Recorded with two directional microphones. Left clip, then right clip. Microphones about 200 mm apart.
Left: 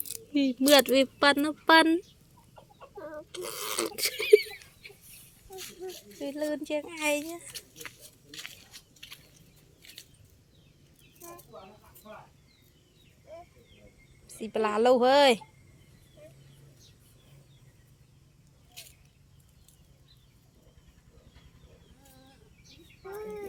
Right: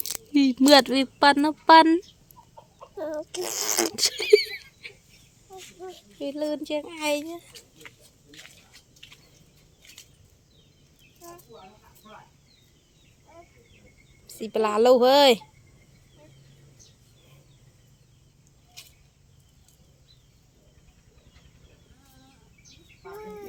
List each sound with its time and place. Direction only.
0.0 s speech: 25° right (ahead or behind); by 1.9 s 10° right (ahead or behind)
3.0 s speech: 35° right (ahead or behind)
3.9 s a sound: 15° right (ahead or behind)
5.5 s speech: 35° left (ahead or behind)
6.1 s a woman's voice: 10° right (ahead or behind)
7.5 s scissors: 40° left (ahead or behind)
9.0 s a sound: 40° left (ahead or behind)
14.3 s a woman's voice: 15° right (ahead or behind)